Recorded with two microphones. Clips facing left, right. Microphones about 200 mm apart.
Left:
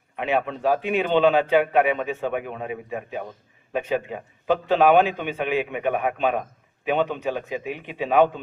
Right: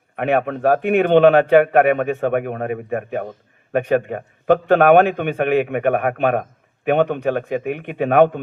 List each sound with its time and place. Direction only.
0.2 s a man's voice: 55° right (ahead or behind)